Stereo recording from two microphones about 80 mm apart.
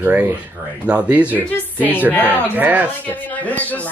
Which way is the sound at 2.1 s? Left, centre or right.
Left.